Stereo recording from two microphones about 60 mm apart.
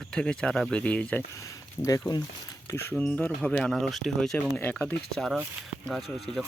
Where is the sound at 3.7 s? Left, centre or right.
Centre.